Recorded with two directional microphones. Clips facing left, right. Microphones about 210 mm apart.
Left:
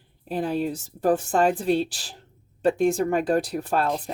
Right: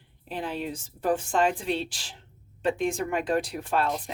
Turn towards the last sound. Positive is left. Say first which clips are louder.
# left 3 dB
turn(degrees=40)  # may be behind; listen again after turning